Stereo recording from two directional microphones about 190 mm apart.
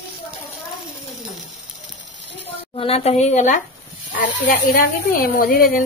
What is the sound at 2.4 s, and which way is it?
A woman's voice, 30° left (ahead or behind).